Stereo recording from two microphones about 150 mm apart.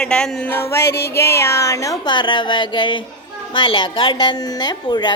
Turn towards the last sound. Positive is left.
turn(degrees=30)  # may be behind; listen again after turning